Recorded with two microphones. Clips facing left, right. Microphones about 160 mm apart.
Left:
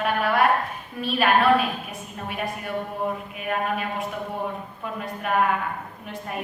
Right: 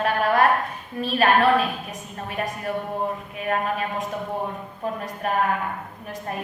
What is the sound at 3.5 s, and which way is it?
A man's voice, 40° right (ahead or behind).